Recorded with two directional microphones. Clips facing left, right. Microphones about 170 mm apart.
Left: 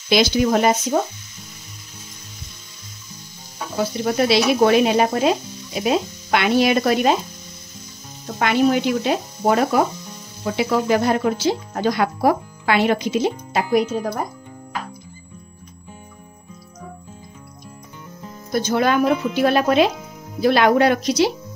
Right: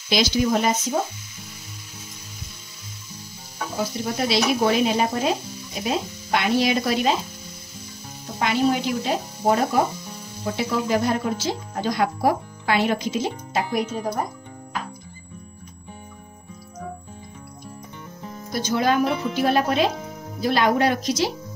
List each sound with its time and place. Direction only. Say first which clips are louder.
0.1 s speech: left 4 dB; 65° left (ahead or behind)
4.0 s speech: left 6 dB; 65° left (ahead or behind)
8.4 s speech: left 4 dB; 65° left (ahead or behind)
18.5 s speech: left 3 dB; 50° left (ahead or behind); by 21.3 s 65° left (ahead or behind)